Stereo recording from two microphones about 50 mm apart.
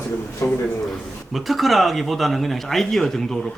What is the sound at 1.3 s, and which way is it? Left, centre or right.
Speech, centre.